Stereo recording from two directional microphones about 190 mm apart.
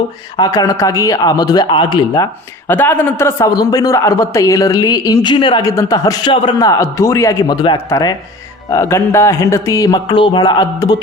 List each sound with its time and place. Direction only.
0.3 s a man's voice: 20° left (ahead or behind)